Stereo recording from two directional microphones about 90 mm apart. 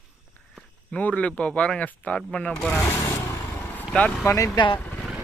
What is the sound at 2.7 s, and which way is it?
Vehicle, 30° left (ahead or behind).